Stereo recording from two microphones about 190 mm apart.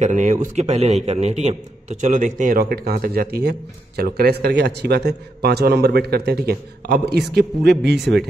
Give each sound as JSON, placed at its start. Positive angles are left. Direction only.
{"t": 0.0, "sound": "a man's voice", "side_deg": -40}